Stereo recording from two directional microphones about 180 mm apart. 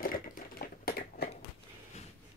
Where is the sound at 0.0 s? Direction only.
55° left (ahead or behind).